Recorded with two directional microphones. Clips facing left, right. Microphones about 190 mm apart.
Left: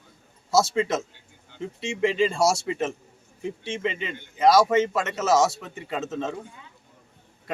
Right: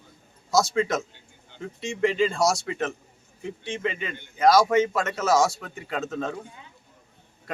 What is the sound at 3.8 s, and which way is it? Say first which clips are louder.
Speech: left 1 dB; 25° left (ahead or behind).